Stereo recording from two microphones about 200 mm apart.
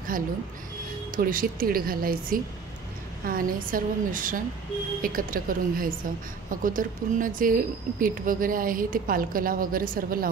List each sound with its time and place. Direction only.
1.1 s a woman's voice: 45° right (ahead or behind)